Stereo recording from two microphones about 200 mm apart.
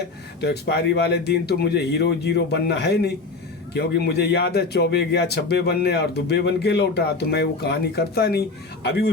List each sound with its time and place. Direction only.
0.4 s a man's voice: 55° left (ahead or behind)